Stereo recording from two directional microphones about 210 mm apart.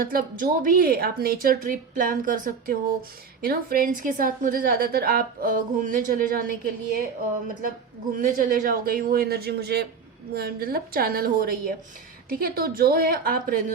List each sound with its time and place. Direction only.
0.0 s a woman's voice: 45° right (ahead or behind)
8.1 s a woman's voice: 40° right (ahead or behind)